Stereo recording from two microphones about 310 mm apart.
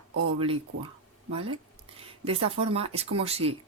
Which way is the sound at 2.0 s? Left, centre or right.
Centre.